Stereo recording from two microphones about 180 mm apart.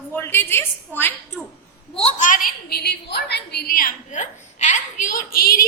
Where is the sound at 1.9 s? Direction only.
40° left (ahead or behind).